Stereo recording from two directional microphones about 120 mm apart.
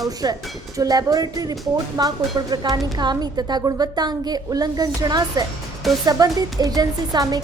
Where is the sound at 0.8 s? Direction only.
30° right (ahead or behind).